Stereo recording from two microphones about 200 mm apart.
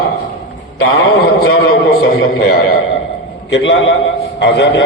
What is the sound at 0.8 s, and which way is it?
A man's voice, 65° left (ahead or behind).